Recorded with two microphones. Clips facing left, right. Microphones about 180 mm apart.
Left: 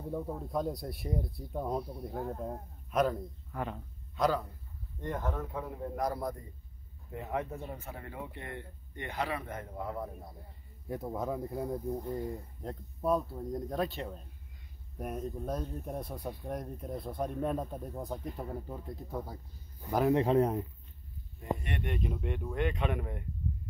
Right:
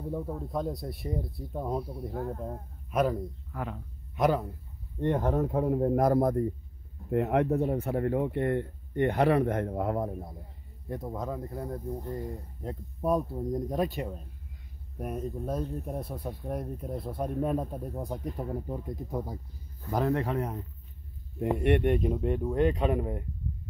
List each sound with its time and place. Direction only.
0.1 s speech: centre (ahead or behind)
4.1 s speech: 20° right (ahead or behind)
5.0 s speech: 35° right (ahead or behind); by 6.5 s 55° right (ahead or behind)
7.1 s speech: 70° right (ahead or behind)
10.9 s speech: 5° left (ahead or behind)
13.0 s speech: 15° right (ahead or behind)
15.0 s speech: centre (ahead or behind)
20.1 s speech: 20° left (ahead or behind)
21.4 s speech: 65° right (ahead or behind); by 23.2 s 35° right (ahead or behind)